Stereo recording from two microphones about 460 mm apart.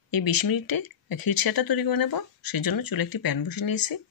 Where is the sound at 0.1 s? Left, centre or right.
Left.